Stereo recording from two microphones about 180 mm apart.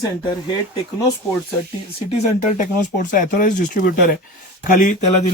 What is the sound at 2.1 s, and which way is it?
Speech, 40° left (ahead or behind).